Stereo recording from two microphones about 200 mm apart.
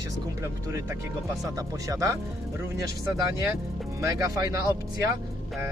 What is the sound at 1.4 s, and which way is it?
Sheep, 15° right (ahead or behind).